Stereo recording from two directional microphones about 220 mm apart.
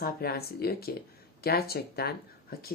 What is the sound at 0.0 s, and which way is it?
Speech, 45° left (ahead or behind).